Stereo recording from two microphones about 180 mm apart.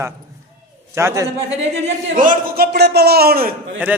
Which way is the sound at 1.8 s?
45° right (ahead or behind).